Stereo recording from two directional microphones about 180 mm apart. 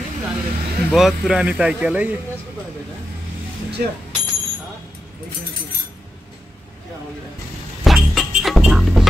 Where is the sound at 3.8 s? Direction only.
55° right (ahead or behind).